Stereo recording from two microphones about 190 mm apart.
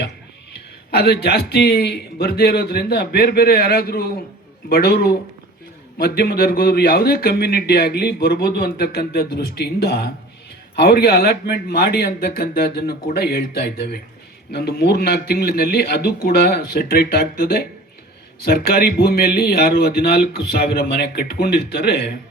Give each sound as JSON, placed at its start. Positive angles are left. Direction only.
{"t": 0.5, "sound": "a man's voice", "side_deg": 55}